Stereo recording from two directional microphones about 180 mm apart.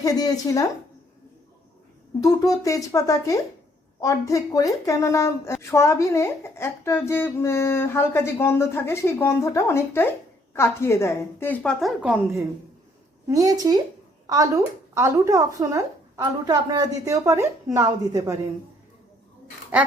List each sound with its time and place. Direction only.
0.0 s speech: 20° left (ahead or behind)
2.2 s a woman's voice: 20° left (ahead or behind); by 12.1 s centre (ahead or behind)
13.2 s a woman's voice: 20° right (ahead or behind)